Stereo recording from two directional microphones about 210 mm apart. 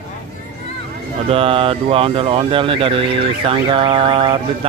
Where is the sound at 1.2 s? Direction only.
25° right (ahead or behind).